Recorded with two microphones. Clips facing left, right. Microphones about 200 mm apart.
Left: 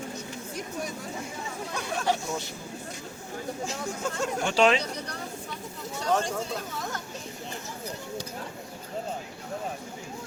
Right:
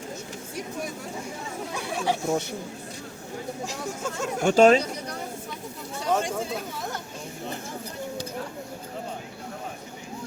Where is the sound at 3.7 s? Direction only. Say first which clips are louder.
Even; centre (ahead or behind).